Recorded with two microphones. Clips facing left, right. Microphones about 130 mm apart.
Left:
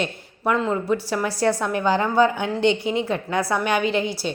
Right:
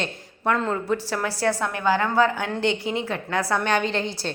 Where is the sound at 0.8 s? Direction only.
15° left (ahead or behind).